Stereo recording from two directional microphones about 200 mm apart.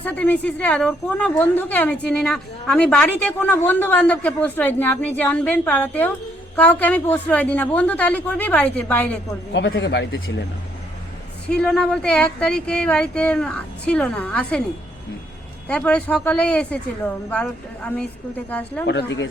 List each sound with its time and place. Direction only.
0.0 s a woman's voice: 10° left (ahead or behind)
9.5 s speech: 65° left (ahead or behind)
11.4 s speech: 5° left (ahead or behind)
15.6 s a woman's voice: 5° left (ahead or behind)
18.9 s speech: 60° left (ahead or behind)